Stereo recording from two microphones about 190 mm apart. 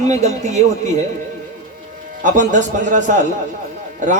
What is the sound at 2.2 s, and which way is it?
Speech, 40° right (ahead or behind).